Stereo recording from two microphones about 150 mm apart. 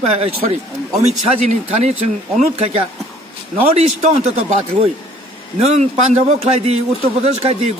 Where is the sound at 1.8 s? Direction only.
50° right (ahead or behind).